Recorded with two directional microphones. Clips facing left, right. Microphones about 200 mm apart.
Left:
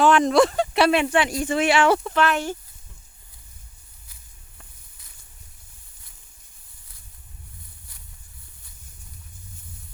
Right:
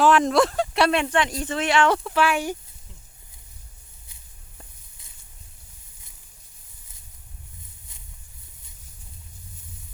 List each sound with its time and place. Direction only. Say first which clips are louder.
0.0 s speech: left 1 dB; centre (ahead or behind)
2.1 s speech: even; 10° right (ahead or behind)
4.1 s a sound: right 1 dB; 20° right (ahead or behind)